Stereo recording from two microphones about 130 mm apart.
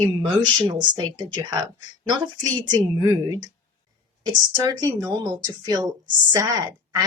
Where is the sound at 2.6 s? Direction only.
30° right (ahead or behind).